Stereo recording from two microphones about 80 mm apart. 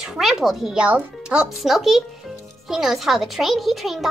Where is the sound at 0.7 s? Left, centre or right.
Centre.